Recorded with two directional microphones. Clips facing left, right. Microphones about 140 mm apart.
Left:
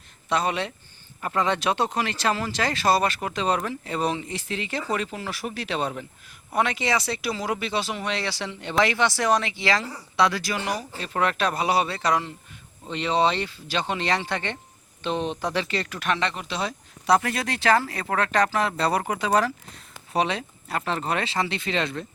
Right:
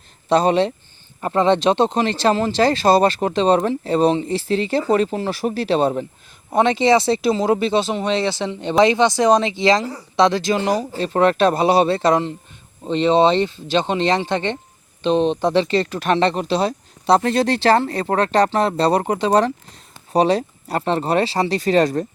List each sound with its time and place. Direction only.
0.3 s speech: 30° right (ahead or behind)